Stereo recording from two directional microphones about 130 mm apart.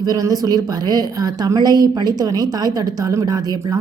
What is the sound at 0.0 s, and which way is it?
A woman's voice, 30° right (ahead or behind).